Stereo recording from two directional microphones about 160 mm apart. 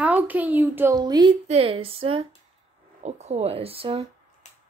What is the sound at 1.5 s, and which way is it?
Speech, 35° right (ahead or behind).